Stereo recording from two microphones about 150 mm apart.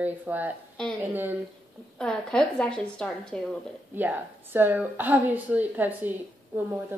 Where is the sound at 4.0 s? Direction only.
10° right (ahead or behind).